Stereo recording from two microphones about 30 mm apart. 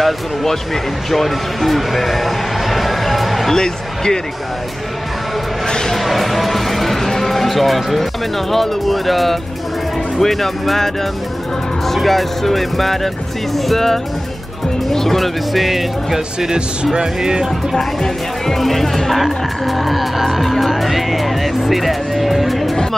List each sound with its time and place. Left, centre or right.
0.0 s speech: centre
1.1 s a sound: centre
3.5 s speech: left
5.9 s music: centre
7.1 s speech: centre
11.9 s speech: centre
16.8 s speech: right
17.7 s speech: centre